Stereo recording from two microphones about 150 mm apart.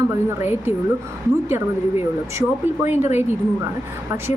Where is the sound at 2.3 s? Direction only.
15° right (ahead or behind).